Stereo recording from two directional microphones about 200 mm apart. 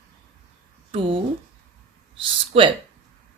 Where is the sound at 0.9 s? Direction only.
25° right (ahead or behind).